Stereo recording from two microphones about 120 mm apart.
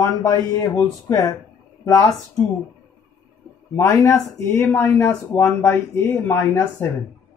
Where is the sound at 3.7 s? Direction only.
25° left (ahead or behind).